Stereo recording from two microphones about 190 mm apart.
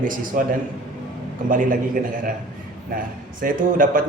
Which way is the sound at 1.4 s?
45° right (ahead or behind).